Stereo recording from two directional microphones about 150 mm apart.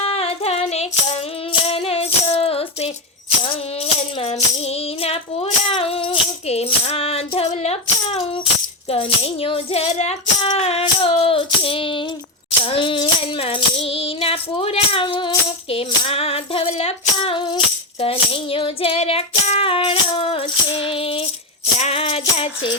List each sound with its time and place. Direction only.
0.0 s a sound: 40° left (ahead or behind)
1.6 s music: 40° left (ahead or behind)
9.9 s music: 50° left (ahead or behind)